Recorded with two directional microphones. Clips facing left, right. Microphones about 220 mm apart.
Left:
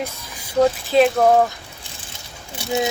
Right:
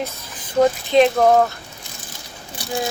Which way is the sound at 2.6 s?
25° left (ahead or behind).